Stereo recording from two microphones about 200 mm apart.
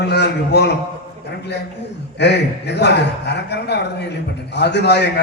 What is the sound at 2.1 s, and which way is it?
A man's voice, 60° left (ahead or behind).